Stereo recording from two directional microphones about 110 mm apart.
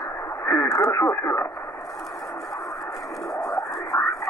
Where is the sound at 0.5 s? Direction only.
25° left (ahead or behind).